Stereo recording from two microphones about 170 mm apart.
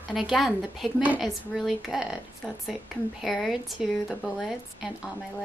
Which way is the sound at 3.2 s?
Centre (ahead or behind).